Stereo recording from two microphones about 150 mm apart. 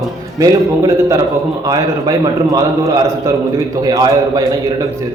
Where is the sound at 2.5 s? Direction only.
25° right (ahead or behind).